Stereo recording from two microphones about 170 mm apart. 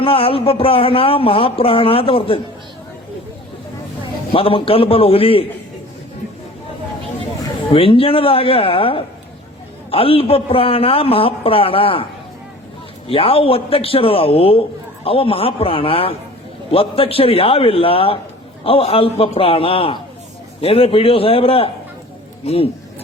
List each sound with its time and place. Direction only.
0.0 s speech: 35° left (ahead or behind)
4.3 s speech: 30° left (ahead or behind)
7.4 s speech: 30° left (ahead or behind)
13.1 s speech: 35° left (ahead or behind)